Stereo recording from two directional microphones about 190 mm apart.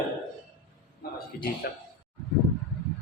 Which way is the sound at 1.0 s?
55° left (ahead or behind).